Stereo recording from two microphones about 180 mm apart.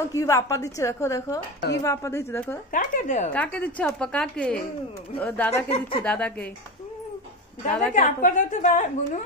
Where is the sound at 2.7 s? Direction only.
45° left (ahead or behind).